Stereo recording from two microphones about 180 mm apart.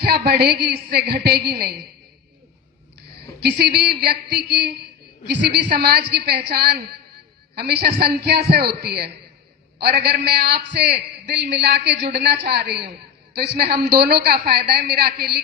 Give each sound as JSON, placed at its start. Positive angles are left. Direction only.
{"t": 0.0, "sound": "a woman's voice", "side_deg": -60}
{"t": 3.4, "sound": "a woman's voice", "side_deg": -60}
{"t": 5.7, "sound": "a woman's voice", "side_deg": -65}